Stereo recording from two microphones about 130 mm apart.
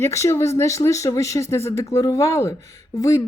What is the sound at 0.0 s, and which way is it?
Speech, 20° left (ahead or behind).